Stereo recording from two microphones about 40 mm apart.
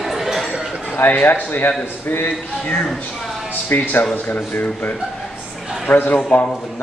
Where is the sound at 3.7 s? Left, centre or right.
Left.